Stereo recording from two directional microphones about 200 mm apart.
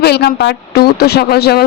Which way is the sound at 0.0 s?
55° left (ahead or behind).